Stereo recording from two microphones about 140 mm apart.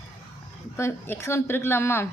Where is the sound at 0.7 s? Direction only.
20° left (ahead or behind).